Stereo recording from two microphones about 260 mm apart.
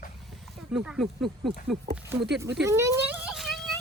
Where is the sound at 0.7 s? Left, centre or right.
Centre.